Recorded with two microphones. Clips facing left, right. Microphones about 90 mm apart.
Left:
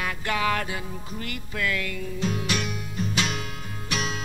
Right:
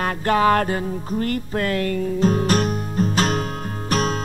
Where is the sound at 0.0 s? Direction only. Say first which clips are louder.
Right 9 dB; 40° right (ahead or behind).